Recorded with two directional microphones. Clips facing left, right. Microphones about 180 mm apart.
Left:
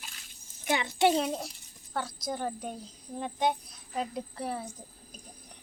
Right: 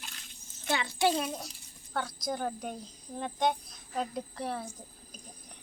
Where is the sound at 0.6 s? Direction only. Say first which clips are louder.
Left 3 dB; 20° left (ahead or behind).